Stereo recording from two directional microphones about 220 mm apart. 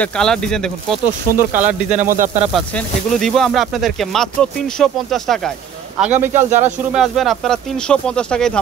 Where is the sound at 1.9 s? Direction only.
35° right (ahead or behind).